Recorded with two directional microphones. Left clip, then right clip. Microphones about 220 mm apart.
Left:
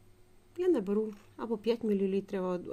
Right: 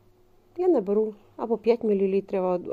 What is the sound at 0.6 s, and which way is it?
A woman's voice, 30° left (ahead or behind).